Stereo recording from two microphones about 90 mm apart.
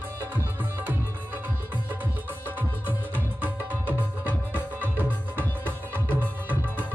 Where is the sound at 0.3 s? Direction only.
20° right (ahead or behind).